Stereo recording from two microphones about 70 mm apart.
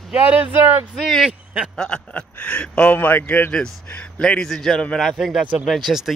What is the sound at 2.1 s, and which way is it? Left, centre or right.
Speech, left.